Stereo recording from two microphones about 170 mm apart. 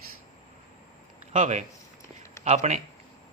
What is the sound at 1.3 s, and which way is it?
Speech, 45° right (ahead or behind).